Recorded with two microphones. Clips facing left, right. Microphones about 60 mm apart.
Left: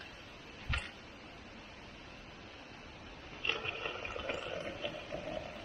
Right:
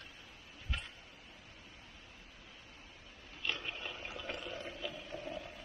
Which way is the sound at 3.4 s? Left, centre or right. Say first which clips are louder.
Left 2 dB; left.